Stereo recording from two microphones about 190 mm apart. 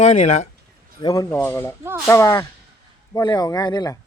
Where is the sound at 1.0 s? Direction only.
20° left (ahead or behind).